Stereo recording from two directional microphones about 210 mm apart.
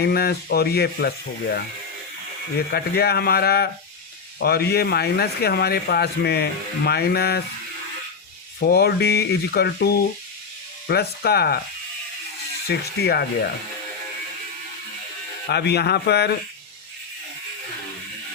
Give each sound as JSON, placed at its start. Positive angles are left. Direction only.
{"t": 0.0, "sound": "speech", "side_deg": 50}
{"t": 2.7, "sound": "speech", "side_deg": 50}
{"t": 8.7, "sound": "speech", "side_deg": 50}
{"t": 12.6, "sound": "speech", "side_deg": 50}
{"t": 15.4, "sound": "speech", "side_deg": 50}